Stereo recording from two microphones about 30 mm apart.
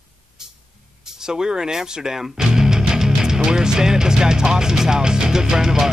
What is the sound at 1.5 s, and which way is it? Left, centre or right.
Music, right.